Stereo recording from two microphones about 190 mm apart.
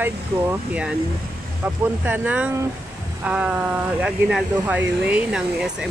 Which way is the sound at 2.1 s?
10° right (ahead or behind).